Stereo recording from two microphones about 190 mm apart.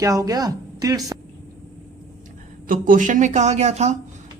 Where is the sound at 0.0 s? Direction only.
15° right (ahead or behind).